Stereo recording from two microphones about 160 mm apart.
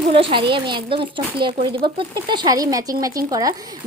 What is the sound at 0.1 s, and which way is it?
A woman's voice, 35° right (ahead or behind).